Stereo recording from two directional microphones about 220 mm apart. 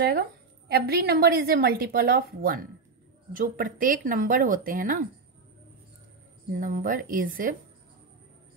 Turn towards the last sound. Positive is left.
turn(degrees=-40)  # may be behind; listen again after turning